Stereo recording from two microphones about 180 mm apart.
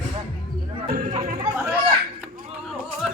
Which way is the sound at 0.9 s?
50° right (ahead or behind).